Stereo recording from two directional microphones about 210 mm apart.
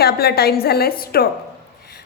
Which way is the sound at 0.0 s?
50° left (ahead or behind).